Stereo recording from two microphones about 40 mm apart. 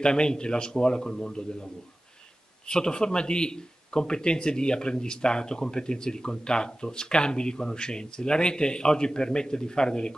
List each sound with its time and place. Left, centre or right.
0.0 s speech: centre
2.7 s speech: centre